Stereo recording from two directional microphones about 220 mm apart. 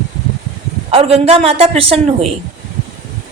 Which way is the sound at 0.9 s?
25° right (ahead or behind).